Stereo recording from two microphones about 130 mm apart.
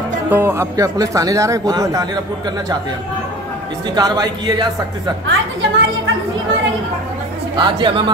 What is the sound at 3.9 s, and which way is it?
Speech, 30° right (ahead or behind).